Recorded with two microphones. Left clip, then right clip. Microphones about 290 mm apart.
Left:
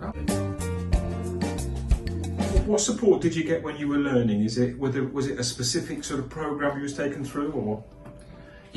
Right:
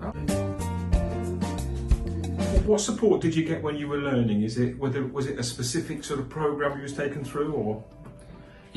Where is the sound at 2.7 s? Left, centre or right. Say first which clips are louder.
Even; right.